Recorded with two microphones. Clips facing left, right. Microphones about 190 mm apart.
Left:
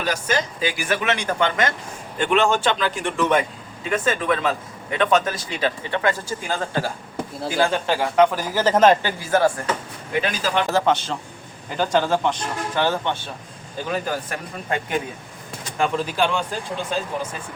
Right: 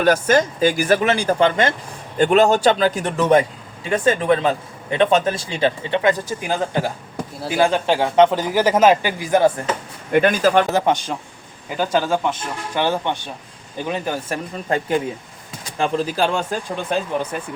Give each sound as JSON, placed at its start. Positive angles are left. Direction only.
{"t": 0.0, "sound": "speech", "side_deg": -50}
{"t": 10.1, "sound": "speech", "side_deg": -55}
{"t": 10.7, "sound": "speech", "side_deg": -15}
{"t": 17.3, "sound": "speech", "side_deg": -60}